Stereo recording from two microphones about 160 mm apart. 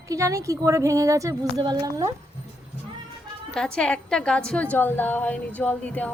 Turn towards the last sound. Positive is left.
turn(degrees=10)  # may be behind; listen again after turning